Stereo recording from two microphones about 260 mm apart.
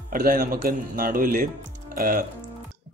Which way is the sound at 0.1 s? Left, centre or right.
Right.